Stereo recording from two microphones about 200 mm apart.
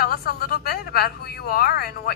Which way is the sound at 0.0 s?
50° left (ahead or behind).